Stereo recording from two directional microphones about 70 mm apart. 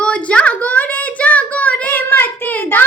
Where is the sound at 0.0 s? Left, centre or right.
Centre.